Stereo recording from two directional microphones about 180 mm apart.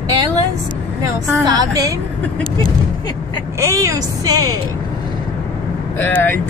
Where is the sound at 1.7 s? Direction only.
20° right (ahead or behind).